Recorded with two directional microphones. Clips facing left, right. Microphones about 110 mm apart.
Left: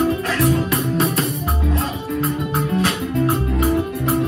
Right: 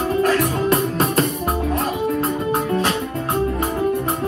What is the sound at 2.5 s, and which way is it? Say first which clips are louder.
Music: right 1 dB; 30° right (ahead or behind).